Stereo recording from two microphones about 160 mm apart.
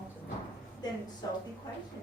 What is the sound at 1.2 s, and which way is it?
Speech, 25° left (ahead or behind).